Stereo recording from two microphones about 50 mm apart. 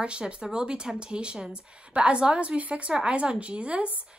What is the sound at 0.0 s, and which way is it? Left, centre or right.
Speech, centre.